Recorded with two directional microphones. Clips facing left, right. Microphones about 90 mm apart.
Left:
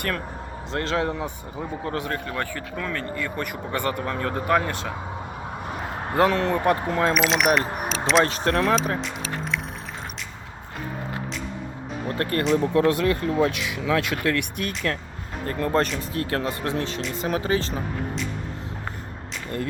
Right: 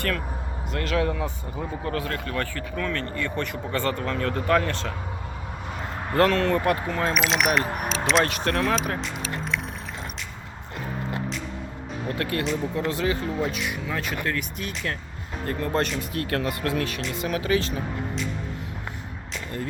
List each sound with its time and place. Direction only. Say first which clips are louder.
0.7 s speech: even; 30° left (ahead or behind)
6.1 s speech: even; 20° left (ahead or behind)
6.8 s speech: left 4 dB; 35° left (ahead or behind)
7.1 s speech: left 1 dB; centre (ahead or behind)
7.8 s vehicle: left 2 dB; centre (ahead or behind)
8.2 s speech: left 2 dB; 35° left (ahead or behind)
9.0 s a sound: left 1 dB; centre (ahead or behind)
12.1 s speech: left 3 dB; 40° left (ahead or behind)
12.7 s speech: left 5 dB; 60° left (ahead or behind)
15.4 s speech: left 3 dB; 40° left (ahead or behind)